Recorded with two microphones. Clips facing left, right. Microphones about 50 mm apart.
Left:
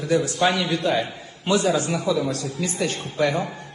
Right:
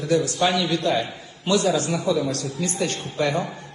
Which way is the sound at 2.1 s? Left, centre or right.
Centre.